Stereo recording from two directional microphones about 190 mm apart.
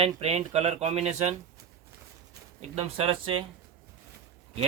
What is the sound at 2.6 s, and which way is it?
Speech, 35° right (ahead or behind).